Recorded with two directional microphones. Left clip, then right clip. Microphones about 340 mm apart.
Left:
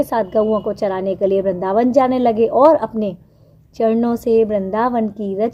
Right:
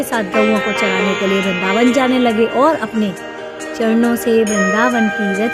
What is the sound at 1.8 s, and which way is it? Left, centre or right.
Music, right.